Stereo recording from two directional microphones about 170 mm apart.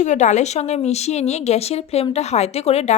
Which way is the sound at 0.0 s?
45° left (ahead or behind).